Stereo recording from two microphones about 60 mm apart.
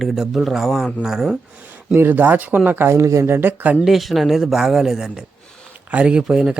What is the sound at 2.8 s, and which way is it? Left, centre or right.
Speech, right.